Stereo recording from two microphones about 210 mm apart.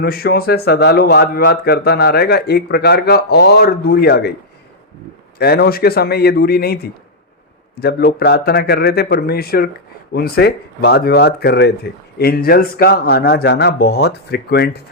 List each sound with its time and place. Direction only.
0.0 s a man's voice: 45° left (ahead or behind)
5.4 s a man's voice: 50° left (ahead or behind)
7.8 s a man's voice: 50° left (ahead or behind)